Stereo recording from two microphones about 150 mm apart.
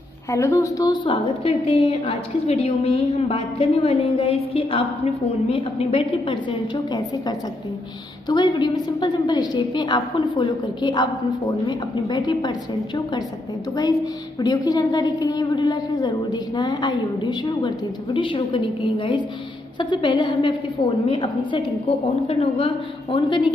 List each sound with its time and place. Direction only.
0.3 s a woman's voice: 20° left (ahead or behind)
14.4 s a woman's voice: 25° left (ahead or behind)